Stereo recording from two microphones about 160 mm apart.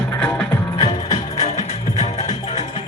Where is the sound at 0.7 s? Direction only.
40° left (ahead or behind).